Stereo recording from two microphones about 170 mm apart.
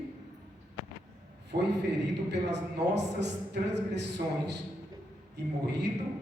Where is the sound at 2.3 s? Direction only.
90° right.